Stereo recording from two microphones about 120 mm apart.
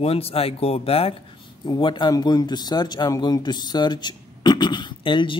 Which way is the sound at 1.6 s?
40° left (ahead or behind).